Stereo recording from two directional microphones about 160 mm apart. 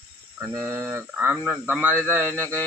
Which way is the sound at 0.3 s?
15° right (ahead or behind).